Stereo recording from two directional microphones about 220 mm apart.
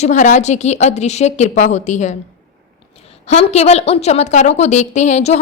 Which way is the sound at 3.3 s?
30° left (ahead or behind).